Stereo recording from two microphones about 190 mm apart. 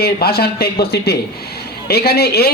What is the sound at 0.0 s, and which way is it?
A man's voice, 55° left (ahead or behind).